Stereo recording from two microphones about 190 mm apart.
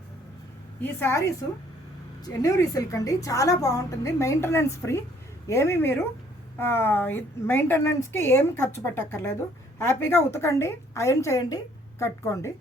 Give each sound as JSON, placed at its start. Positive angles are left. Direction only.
{"t": 0.8, "sound": "a woman's voice", "side_deg": 10}